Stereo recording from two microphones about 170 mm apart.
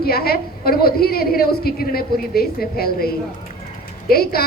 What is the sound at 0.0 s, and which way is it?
A woman's voice, 65° left (ahead or behind).